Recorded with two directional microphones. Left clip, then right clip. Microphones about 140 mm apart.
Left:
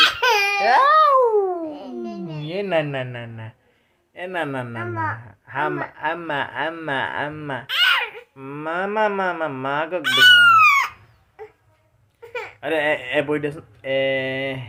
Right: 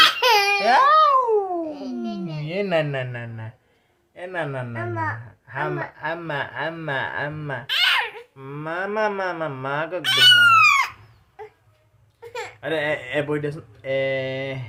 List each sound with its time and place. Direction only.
0.0 s laughter: 30° right (ahead or behind)
0.6 s babbling: 15° left (ahead or behind)
0.9 s cat: 25° left (ahead or behind)
2.0 s a sound: 35° right (ahead or behind)
2.5 s a man's voice: 5° left (ahead or behind)
4.1 s speech: 25° left (ahead or behind)
4.8 s speech: 10° right (ahead or behind)
5.5 s speech: 35° left (ahead or behind)
7.7 s babbling: 20° right (ahead or behind)
8.4 s speech: 25° left (ahead or behind)
10.0 s fowl: 20° right (ahead or behind)
11.4 s a sound: 25° right (ahead or behind)
12.5 s speech: 20° left (ahead or behind)